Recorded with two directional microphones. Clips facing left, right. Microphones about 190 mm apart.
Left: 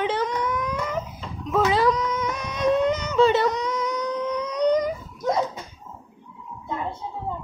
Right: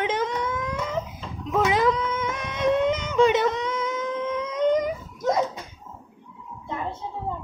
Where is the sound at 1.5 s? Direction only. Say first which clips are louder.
Left 1 dB; 20° right (ahead or behind).